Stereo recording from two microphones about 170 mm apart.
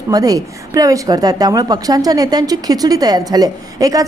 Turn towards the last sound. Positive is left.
turn(degrees=-20)  # may be behind; listen again after turning